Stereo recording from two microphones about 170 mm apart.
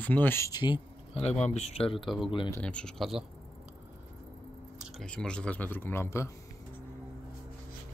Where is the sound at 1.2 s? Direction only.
40° left (ahead or behind).